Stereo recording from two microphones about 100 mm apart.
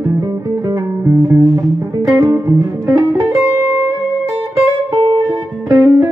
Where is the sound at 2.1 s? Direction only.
30° right (ahead or behind).